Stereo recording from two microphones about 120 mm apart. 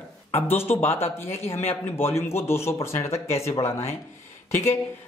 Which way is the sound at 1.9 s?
20° left (ahead or behind).